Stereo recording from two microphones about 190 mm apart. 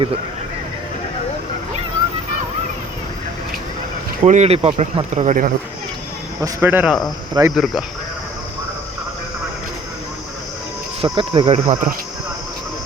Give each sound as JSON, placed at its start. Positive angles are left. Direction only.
{"t": 4.2, "sound": "speech", "side_deg": -35}
{"t": 6.4, "sound": "speech", "side_deg": -10}
{"t": 7.4, "sound": "speech", "side_deg": -20}
{"t": 11.0, "sound": "speech", "side_deg": -30}